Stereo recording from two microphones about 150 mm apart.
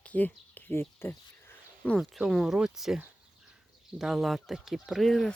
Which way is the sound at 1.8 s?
5° left (ahead or behind).